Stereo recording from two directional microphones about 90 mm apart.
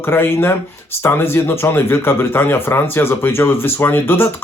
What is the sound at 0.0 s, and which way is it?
Speech, 25° left (ahead or behind).